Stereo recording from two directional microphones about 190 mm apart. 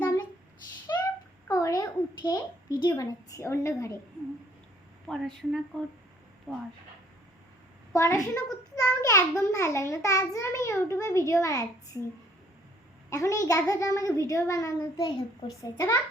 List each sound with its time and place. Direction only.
0.0 s a sound: 10° left (ahead or behind)
2.8 s a child's voice: 20° left (ahead or behind)
5.0 s a woman's voice: centre (ahead or behind)
7.9 s a child's voice: 15° left (ahead or behind)
13.1 s a child's voice: 15° left (ahead or behind)